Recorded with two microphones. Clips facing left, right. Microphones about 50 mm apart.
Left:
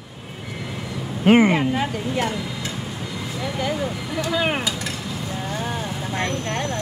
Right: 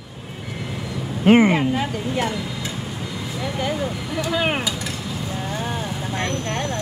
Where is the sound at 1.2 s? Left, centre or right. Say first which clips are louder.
Right 1 dB; centre.